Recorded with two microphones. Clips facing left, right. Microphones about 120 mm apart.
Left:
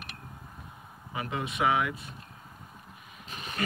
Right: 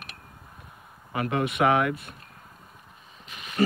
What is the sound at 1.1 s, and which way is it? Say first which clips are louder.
Speech: right 7 dB; 65° right (ahead or behind).